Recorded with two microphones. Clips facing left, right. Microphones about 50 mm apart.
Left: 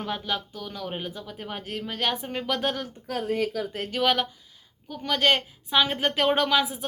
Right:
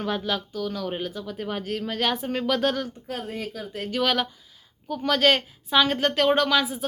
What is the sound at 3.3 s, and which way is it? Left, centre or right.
Speech, left.